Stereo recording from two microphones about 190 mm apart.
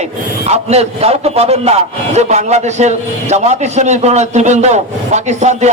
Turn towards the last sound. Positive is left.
turn(degrees=-35)  # may be behind; listen again after turning